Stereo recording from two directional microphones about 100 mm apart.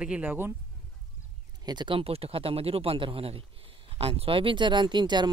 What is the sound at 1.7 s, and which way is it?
Speech, 50° right (ahead or behind).